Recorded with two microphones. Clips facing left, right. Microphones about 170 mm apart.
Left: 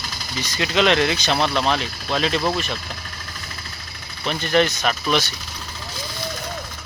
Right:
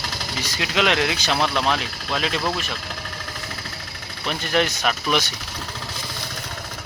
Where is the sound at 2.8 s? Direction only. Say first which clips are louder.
Right 2 dB; 80° right.